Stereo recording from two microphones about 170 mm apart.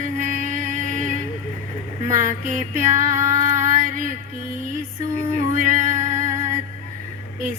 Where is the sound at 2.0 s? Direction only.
50° right (ahead or behind).